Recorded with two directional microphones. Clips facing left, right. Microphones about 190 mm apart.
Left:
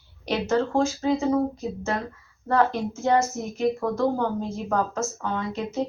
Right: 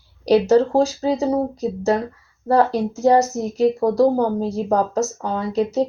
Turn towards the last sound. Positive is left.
turn(degrees=-35)  # may be behind; listen again after turning